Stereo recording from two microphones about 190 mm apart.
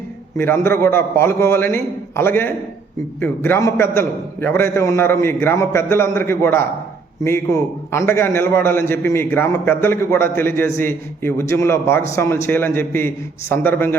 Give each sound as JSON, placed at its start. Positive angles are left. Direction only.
{"t": 0.3, "sound": "a man's voice", "side_deg": 10}